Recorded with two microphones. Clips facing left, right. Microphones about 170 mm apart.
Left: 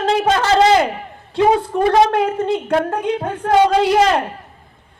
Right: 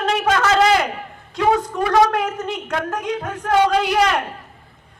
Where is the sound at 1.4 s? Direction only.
30° left (ahead or behind).